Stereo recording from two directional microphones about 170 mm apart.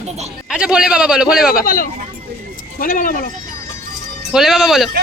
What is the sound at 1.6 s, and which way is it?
Speech, 55° left (ahead or behind).